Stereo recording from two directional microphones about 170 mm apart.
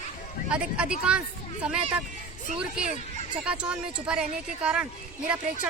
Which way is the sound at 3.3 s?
5° right (ahead or behind).